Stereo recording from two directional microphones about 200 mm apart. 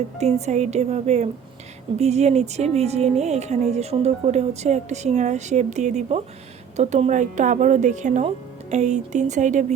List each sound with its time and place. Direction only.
0.2 s a woman's voice: 35° right (ahead or behind)